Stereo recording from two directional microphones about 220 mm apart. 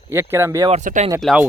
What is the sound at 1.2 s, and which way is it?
Speech, centre (ahead or behind).